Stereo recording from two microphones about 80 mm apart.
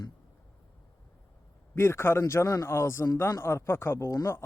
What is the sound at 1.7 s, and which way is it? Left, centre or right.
Speech, left.